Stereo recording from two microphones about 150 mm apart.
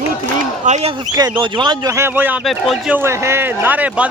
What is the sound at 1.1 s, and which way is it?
Speech, 30° right (ahead or behind).